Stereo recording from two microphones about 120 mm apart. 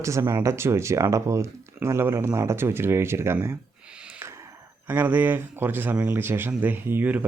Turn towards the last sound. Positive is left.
turn(degrees=-15)  # may be behind; listen again after turning